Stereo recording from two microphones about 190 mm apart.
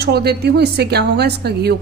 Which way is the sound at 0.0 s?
55° right (ahead or behind).